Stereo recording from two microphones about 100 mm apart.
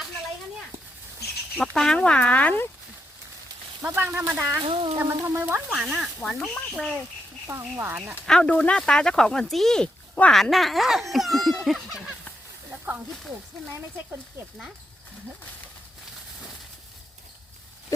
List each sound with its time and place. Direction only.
1.5 s speech: 5° left (ahead or behind)
3.9 s speech: 25° right (ahead or behind)
4.6 s a sound: 60° right (ahead or behind)
4.9 s speech: 25° right (ahead or behind)
5.7 s speech: 5° right (ahead or behind)
7.4 s speech: 25° right (ahead or behind)
8.3 s speech: 10° left (ahead or behind)
12.7 s snake: 15° right (ahead or behind)